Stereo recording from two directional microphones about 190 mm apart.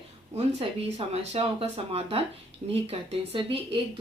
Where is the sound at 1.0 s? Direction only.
30° right (ahead or behind).